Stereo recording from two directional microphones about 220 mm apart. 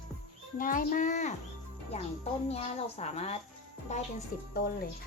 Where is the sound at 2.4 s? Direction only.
30° left (ahead or behind).